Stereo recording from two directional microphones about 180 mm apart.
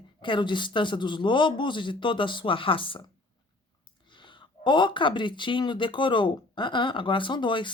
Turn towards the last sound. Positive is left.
turn(degrees=25)  # may be behind; listen again after turning